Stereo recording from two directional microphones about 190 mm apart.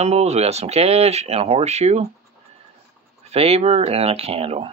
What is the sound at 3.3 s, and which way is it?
Speech, 35° right (ahead or behind).